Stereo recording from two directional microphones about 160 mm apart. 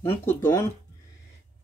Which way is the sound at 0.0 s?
15° left (ahead or behind).